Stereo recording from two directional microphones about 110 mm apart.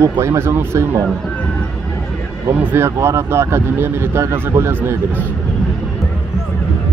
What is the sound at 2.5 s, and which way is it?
Speech, 25° right (ahead or behind).